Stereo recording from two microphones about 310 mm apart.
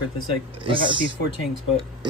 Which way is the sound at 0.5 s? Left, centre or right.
Centre.